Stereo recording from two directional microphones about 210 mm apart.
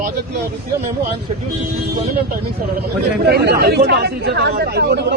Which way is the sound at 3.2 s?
50° right (ahead or behind).